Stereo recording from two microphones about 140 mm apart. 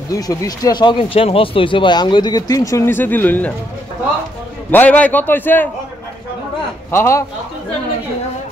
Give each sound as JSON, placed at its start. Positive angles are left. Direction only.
{"t": 0.1, "sound": "speech", "side_deg": 25}
{"t": 4.6, "sound": "a man's voice", "side_deg": 10}
{"t": 6.9, "sound": "speech", "side_deg": 20}